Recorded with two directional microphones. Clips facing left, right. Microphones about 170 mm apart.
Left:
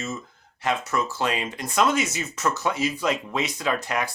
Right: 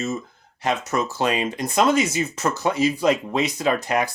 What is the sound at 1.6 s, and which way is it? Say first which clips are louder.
Speech: right 3 dB; 30° right (ahead or behind).